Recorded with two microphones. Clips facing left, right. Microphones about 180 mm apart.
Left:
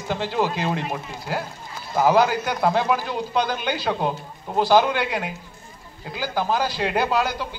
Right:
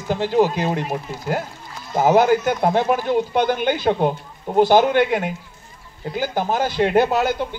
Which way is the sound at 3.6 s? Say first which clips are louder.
Right 6 dB; 50° right (ahead or behind).